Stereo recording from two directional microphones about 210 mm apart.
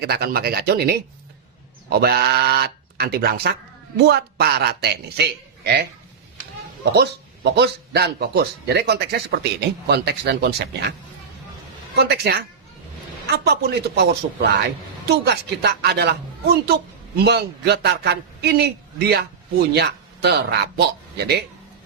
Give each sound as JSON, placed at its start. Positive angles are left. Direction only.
{"t": 0.0, "sound": "speech", "side_deg": -50}
{"t": 6.9, "sound": "speech", "side_deg": -50}
{"t": 11.9, "sound": "speech", "side_deg": -50}
{"t": 17.2, "sound": "speech", "side_deg": -50}